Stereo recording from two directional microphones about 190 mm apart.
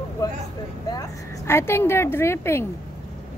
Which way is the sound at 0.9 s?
15° left (ahead or behind).